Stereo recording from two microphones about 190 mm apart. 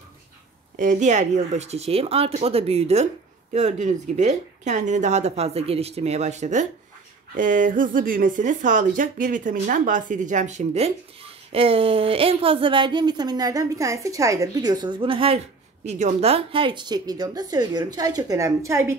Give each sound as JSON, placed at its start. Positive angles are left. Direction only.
{"t": 0.7, "sound": "speech", "side_deg": -40}